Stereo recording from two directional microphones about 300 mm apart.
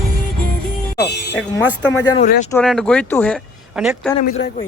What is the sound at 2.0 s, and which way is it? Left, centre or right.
Speech, centre.